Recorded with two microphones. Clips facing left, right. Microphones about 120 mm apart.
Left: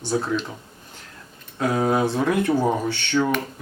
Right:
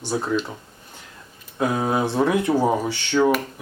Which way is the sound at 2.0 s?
15° right (ahead or behind).